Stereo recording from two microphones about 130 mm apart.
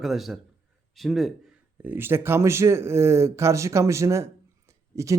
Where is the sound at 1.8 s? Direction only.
15° right (ahead or behind).